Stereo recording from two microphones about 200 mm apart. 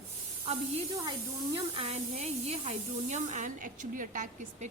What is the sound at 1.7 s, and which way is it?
Speech, 30° right (ahead or behind).